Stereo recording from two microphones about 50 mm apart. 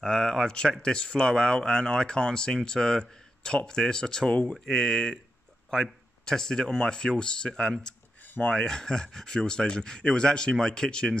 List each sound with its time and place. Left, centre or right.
0.0 s speech: centre